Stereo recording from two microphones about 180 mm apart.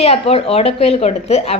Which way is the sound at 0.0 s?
35° left (ahead or behind).